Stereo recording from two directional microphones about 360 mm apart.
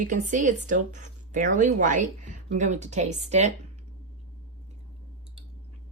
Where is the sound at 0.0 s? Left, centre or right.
Right.